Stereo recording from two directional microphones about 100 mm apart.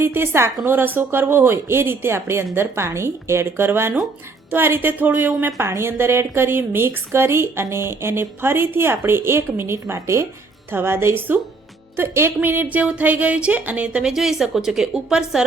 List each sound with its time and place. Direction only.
0.0 s a woman's voice: 25° right (ahead or behind); by 15.4 s 5° right (ahead or behind)